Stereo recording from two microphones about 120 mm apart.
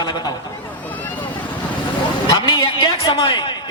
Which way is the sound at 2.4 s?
35° left (ahead or behind).